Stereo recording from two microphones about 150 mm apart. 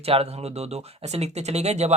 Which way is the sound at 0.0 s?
40° right (ahead or behind).